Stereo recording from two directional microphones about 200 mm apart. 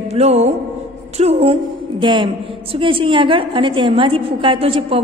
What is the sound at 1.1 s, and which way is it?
A woman's voice, 30° right (ahead or behind).